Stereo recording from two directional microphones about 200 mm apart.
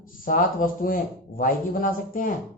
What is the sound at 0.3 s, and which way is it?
Speech, 45° left (ahead or behind).